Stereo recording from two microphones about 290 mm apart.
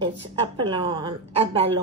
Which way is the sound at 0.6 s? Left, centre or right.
Centre.